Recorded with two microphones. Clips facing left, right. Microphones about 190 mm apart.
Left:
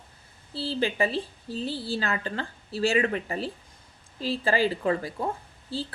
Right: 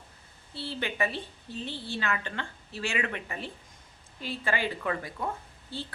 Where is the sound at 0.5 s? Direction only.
30° left (ahead or behind).